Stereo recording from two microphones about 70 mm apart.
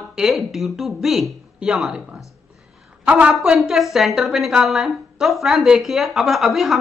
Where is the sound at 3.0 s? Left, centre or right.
Centre.